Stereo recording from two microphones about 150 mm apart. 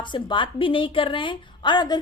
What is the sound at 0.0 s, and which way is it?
A woman's voice, 30° left (ahead or behind).